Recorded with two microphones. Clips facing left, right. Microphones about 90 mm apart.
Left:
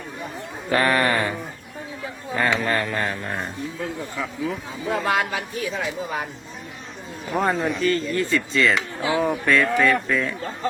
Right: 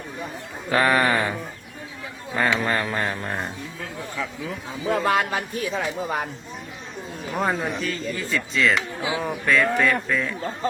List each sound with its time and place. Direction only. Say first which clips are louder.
0.7 s speech: even; 5° right (ahead or behind)
2.3 s speech: even; 5° right (ahead or behind)
4.2 s speech: left 3 dB; centre (ahead or behind)
4.9 s speech: right 1 dB; 45° right (ahead or behind)
7.3 s speech: left 3 dB; centre (ahead or behind)